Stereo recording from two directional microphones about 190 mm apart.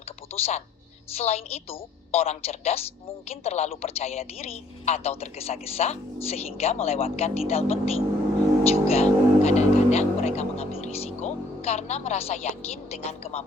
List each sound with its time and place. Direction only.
0.3 s speech: 30° left (ahead or behind)
8.7 s music: 35° left (ahead or behind)
13.0 s speech: 35° left (ahead or behind)